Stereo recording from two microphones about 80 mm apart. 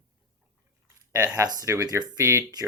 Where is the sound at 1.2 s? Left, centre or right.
Right.